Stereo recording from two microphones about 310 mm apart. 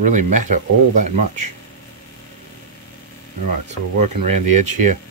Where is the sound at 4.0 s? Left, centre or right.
Right.